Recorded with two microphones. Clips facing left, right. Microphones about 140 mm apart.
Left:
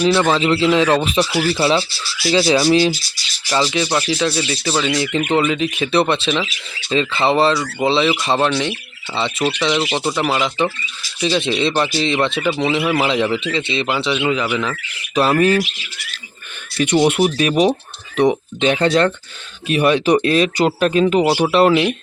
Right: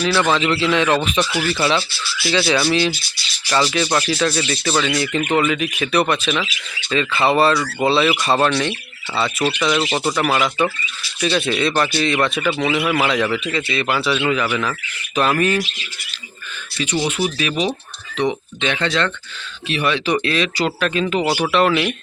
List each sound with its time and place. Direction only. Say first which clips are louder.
0.0 s speech: left 3 dB; 25° left (ahead or behind)
3.5 s speech: even; 15° left (ahead or behind)
4.9 s a man's voice: left 1 dB; 20° left (ahead or behind)
8.4 s speech: even; 5° left (ahead or behind)
9.6 s a man's voice: even; 25° left (ahead or behind)
9.8 s speech: even; centre (ahead or behind)
10.2 s a man's voice: even; 15° left (ahead or behind)
15.1 s speech: left 3 dB; 35° left (ahead or behind)
16.7 s speech: left 7 dB; 50° left (ahead or behind)
17.2 s a man's voice: left 6 dB; 45° left (ahead or behind); by 21.9 s 20° left (ahead or behind)